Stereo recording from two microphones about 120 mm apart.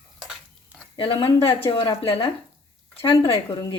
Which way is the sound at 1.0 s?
45° left (ahead or behind).